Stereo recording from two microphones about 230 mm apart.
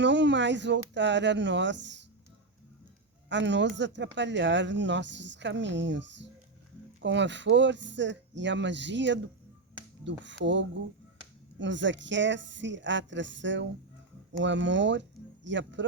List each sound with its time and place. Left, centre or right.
0.0 s speech: right
3.2 s speech: right
10.2 s speech: right